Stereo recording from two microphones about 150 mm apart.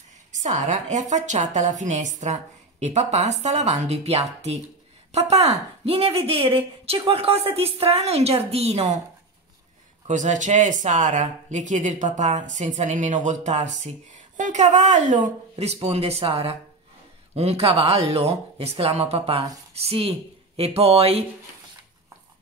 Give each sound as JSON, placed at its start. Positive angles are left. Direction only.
{"t": 0.4, "sound": "a woman's voice", "side_deg": -55}
{"t": 10.0, "sound": "speech", "side_deg": -55}